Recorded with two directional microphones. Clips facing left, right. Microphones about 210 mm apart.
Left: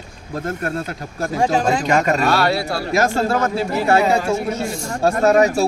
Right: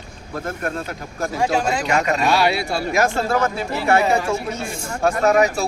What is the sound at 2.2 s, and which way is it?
Speech, centre (ahead or behind).